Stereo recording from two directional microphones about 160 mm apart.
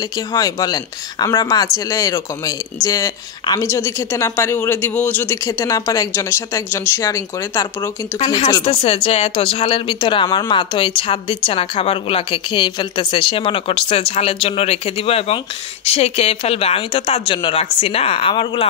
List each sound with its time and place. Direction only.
0.3 s a woman's voice: 20° left (ahead or behind)
8.6 s speech: 35° left (ahead or behind)